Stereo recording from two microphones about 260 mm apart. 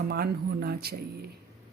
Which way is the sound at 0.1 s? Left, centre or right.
Right.